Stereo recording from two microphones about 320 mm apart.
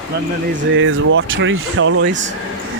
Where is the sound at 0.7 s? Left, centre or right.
Right.